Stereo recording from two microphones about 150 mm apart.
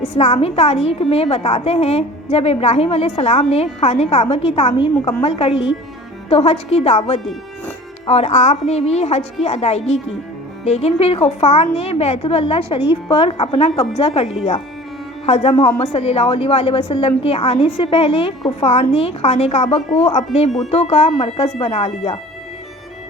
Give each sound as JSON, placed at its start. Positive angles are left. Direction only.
{"t": 0.1, "sound": "a woman's voice", "side_deg": 45}